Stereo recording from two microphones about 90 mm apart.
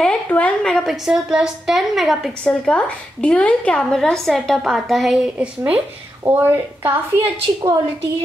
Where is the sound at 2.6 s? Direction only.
15° left (ahead or behind).